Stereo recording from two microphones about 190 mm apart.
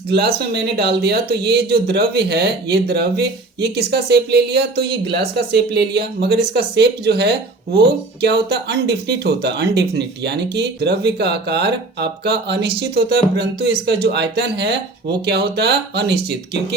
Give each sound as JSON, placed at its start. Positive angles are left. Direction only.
{"t": 0.1, "sound": "speech", "side_deg": -60}